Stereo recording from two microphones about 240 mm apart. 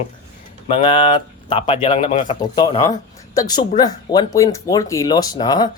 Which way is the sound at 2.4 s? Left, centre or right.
Centre.